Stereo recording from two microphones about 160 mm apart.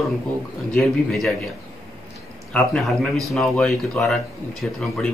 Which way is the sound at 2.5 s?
Centre (ahead or behind).